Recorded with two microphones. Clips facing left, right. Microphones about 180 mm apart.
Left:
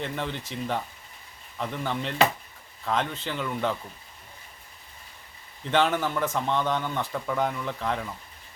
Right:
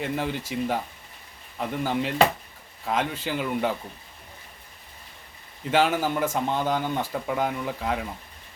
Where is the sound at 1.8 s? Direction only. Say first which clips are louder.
Right 3 dB; 10° right (ahead or behind).